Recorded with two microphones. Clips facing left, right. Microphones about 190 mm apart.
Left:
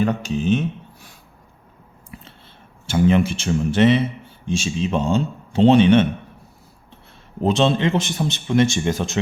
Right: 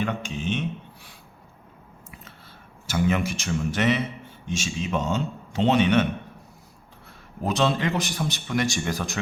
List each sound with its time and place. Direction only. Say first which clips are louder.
0.0 s speech: left 7 dB; 40° left (ahead or behind)
2.8 s speech: left 7 dB; 30° left (ahead or behind)
7.4 s speech: left 6 dB; 25° left (ahead or behind)